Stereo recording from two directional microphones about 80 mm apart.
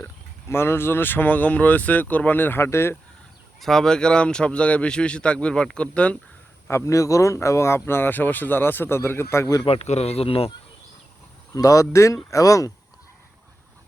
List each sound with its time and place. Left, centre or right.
0.0 s speech: left
3.6 s speech: centre
6.7 s speech: left
11.5 s speech: left